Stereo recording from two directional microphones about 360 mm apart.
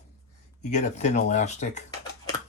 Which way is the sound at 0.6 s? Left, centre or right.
Centre.